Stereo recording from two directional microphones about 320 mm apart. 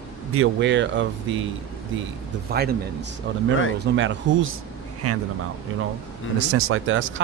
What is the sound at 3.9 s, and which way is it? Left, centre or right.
Speech, right.